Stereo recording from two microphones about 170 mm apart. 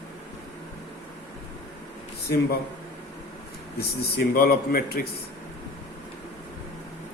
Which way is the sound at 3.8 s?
65° left (ahead or behind).